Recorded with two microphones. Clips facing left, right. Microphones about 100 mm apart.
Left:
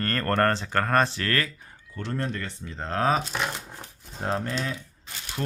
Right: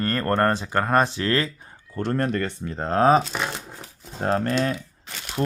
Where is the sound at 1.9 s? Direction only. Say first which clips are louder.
Right 7 dB; 50° right (ahead or behind); by 3.2 s 35° right (ahead or behind).